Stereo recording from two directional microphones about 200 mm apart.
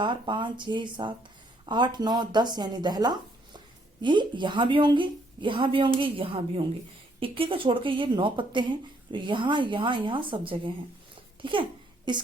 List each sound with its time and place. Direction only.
0.0 s speech: 25° right (ahead or behind)
12.1 s speech: 20° right (ahead or behind)